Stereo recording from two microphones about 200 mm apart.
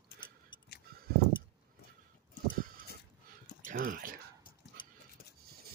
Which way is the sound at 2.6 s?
45° right (ahead or behind).